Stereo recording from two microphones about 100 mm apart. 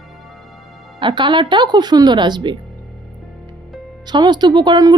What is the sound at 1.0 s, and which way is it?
A woman's voice, 50° right (ahead or behind).